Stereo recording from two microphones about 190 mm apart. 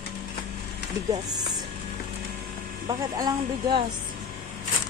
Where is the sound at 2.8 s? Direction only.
25° right (ahead or behind).